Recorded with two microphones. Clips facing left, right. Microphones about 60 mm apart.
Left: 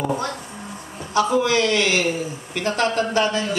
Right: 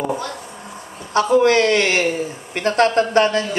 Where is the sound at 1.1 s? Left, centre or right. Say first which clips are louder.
Right 4 dB; right.